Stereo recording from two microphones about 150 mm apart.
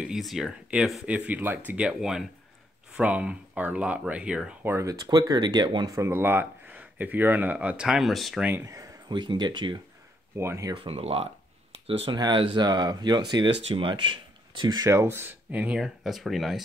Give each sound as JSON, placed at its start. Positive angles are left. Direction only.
{"t": 0.0, "sound": "speech", "side_deg": 0}
{"t": 4.7, "sound": "speech", "side_deg": -25}
{"t": 8.5, "sound": "speech", "side_deg": -15}
{"t": 10.3, "sound": "speech", "side_deg": -20}
{"t": 10.7, "sound": "speech", "side_deg": -40}